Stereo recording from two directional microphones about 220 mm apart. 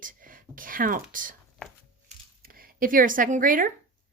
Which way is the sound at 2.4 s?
40° right (ahead or behind).